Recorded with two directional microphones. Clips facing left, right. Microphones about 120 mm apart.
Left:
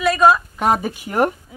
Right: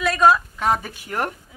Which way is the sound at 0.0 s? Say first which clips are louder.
Left 2 dB; 5° left (ahead or behind).